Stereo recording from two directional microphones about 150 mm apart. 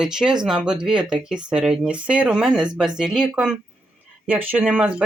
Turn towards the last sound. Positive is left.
turn(degrees=-5)  # may be behind; listen again after turning